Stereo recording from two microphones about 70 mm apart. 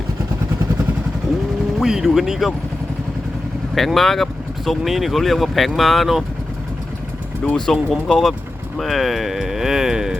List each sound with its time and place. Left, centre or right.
1.8 s speech: centre
3.8 s speech: centre
7.4 s speech: centre